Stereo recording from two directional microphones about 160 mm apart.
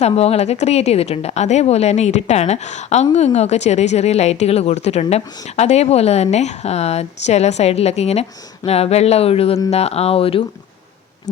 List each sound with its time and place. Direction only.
0.0 s a woman's voice: 45° left (ahead or behind)